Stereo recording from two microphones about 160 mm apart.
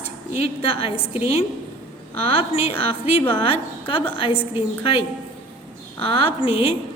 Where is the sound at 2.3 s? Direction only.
35° left (ahead or behind).